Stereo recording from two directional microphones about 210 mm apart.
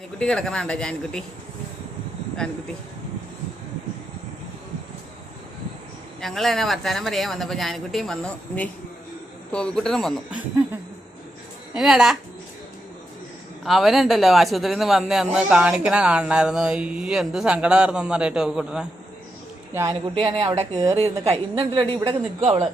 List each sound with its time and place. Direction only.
0.2 s a man's voice: 5° left (ahead or behind)
6.1 s a man's voice: centre (ahead or behind)
13.7 s a man's voice: centre (ahead or behind)
19.7 s speech: 15° right (ahead or behind)
20.3 s a woman's voice: 25° right (ahead or behind)